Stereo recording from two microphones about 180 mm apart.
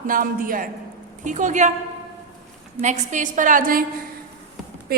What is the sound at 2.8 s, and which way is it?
A woman's voice, 40° right (ahead or behind).